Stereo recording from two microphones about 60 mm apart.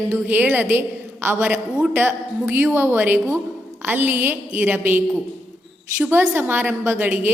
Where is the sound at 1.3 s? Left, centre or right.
Right.